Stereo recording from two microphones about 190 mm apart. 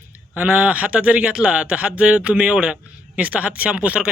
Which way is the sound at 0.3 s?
5° right (ahead or behind).